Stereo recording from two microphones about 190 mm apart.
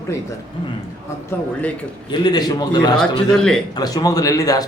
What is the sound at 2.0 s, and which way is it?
Speech, 20° left (ahead or behind).